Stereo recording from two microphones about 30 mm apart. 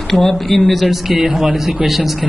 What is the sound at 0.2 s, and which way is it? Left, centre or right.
Speech, centre.